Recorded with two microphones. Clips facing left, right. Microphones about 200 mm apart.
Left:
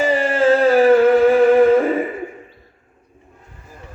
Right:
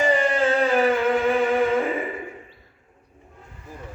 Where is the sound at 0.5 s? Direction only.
35° left (ahead or behind).